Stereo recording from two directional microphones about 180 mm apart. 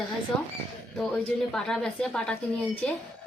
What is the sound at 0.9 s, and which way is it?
A woman's voice, centre (ahead or behind).